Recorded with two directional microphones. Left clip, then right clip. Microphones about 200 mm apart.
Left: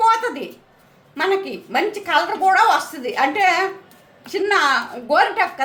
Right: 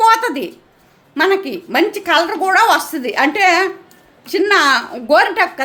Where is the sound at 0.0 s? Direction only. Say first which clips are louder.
Right 5 dB; 45° right (ahead or behind).